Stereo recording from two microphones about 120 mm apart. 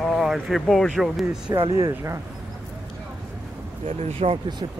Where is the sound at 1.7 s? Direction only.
25° right (ahead or behind).